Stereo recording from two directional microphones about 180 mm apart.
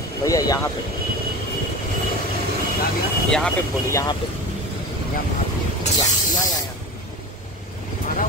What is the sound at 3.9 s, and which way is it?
Speech, 20° left (ahead or behind).